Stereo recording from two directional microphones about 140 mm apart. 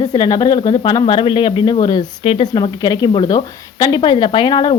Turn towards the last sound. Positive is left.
turn(degrees=30)  # may be behind; listen again after turning